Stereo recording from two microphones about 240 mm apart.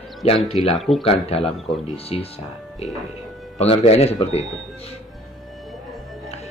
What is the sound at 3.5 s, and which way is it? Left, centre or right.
Speech, left.